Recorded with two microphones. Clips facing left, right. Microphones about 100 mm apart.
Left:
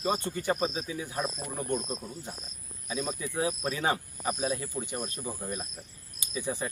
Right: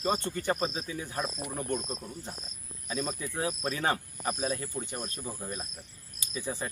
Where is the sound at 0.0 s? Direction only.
15° left (ahead or behind).